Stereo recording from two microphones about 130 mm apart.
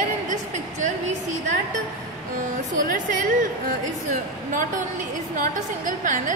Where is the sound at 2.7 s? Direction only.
90° right.